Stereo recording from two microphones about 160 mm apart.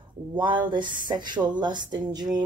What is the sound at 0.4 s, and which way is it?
Speech, 30° right (ahead or behind).